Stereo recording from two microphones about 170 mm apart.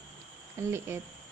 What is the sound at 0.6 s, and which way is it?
Speech, 15° right (ahead or behind).